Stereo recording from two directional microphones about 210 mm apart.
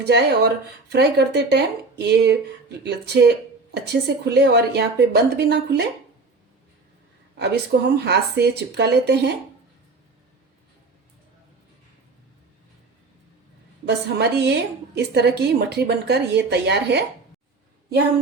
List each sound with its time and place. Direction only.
0.0 s a woman's voice: 55° right (ahead or behind)
7.3 s a woman's voice: 55° right (ahead or behind)
13.8 s a woman's voice: 55° right (ahead or behind)